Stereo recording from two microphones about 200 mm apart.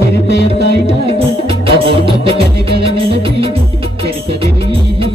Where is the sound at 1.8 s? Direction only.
25° right (ahead or behind).